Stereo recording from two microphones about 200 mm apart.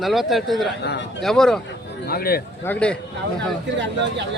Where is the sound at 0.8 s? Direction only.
55° left (ahead or behind).